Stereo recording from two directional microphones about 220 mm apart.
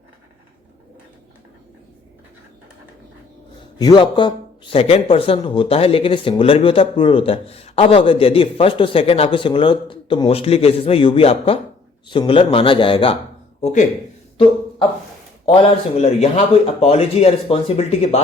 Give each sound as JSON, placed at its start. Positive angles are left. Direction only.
{"t": 3.8, "sound": "speech", "side_deg": 20}
{"t": 15.4, "sound": "speech", "side_deg": 25}